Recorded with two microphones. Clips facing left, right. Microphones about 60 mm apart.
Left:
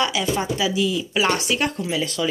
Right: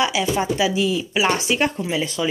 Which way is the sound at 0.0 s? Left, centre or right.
Centre.